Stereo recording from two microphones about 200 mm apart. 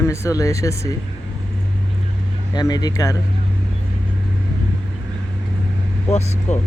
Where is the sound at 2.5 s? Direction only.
20° left (ahead or behind).